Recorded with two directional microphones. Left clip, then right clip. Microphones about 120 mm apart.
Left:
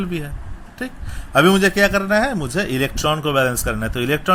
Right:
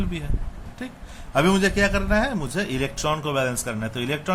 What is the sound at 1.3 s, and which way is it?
A man's voice, 35° left (ahead or behind).